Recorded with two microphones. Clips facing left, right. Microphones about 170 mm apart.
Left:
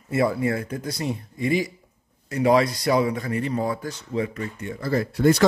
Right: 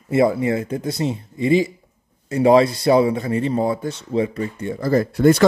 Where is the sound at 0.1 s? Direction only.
25° right (ahead or behind).